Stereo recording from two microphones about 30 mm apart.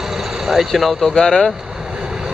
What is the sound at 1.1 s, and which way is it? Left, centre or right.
Speech, centre.